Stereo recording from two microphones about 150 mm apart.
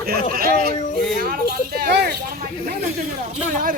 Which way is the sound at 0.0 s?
85° right.